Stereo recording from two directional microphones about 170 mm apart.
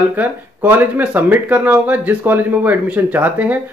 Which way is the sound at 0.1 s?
10° right (ahead or behind).